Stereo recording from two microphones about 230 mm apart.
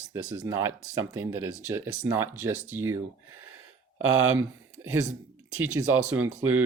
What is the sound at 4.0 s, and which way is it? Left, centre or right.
Speech, right.